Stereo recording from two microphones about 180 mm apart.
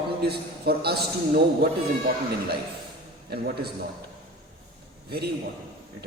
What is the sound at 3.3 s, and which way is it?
Speech, 60° right (ahead or behind).